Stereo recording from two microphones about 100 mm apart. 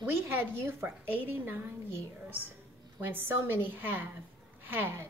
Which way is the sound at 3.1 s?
20° right (ahead or behind).